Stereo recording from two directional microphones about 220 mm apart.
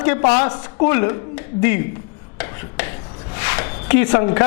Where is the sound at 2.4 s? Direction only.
10° left (ahead or behind).